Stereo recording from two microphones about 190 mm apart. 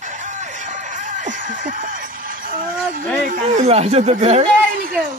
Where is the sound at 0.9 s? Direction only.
40° right (ahead or behind).